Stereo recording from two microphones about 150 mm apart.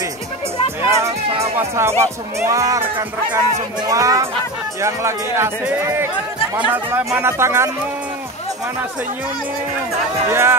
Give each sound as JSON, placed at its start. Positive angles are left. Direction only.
{"t": 0.8, "sound": "music", "side_deg": -20}
{"t": 1.4, "sound": "speech", "side_deg": -20}
{"t": 6.7, "sound": "speech", "side_deg": -10}
{"t": 10.3, "sound": "speech", "side_deg": -15}